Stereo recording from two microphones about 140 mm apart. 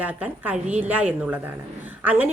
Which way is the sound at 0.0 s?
10° right (ahead or behind).